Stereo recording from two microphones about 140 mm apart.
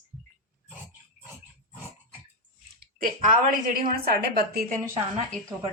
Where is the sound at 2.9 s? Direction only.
85° right.